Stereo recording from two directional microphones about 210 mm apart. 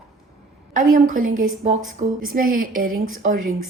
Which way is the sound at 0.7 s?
40° right (ahead or behind).